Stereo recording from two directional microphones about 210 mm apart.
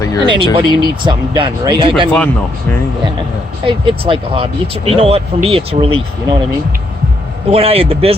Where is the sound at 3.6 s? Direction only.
25° right (ahead or behind).